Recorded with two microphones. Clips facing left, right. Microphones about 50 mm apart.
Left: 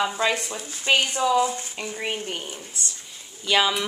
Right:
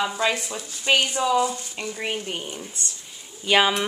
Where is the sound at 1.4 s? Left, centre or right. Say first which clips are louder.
Left 1 dB; left.